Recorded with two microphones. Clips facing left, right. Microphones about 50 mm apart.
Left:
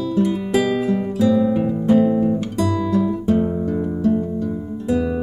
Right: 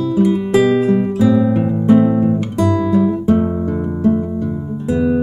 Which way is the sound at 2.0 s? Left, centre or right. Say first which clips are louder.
Right 3 dB; right.